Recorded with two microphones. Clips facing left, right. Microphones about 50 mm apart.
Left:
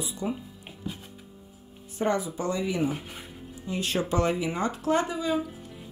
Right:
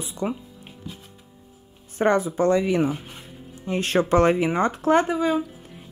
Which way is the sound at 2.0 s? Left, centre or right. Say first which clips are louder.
Right 7 dB; right.